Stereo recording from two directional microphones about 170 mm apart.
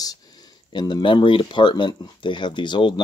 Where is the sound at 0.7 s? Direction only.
25° left (ahead or behind).